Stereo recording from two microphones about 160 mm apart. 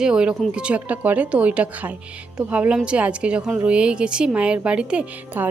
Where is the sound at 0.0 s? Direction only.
5° right (ahead or behind).